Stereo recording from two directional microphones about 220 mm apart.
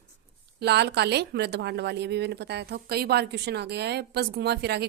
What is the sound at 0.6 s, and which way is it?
A woman's voice, 50° right (ahead or behind).